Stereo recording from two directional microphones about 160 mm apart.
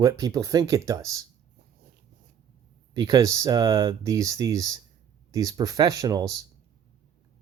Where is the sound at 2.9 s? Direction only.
25° right (ahead or behind).